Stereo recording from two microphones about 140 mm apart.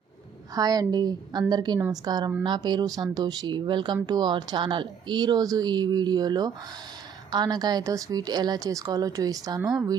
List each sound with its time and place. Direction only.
0.5 s a woman's voice: 25° right (ahead or behind)